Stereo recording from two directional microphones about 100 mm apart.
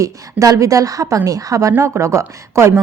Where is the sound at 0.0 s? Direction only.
35° right (ahead or behind).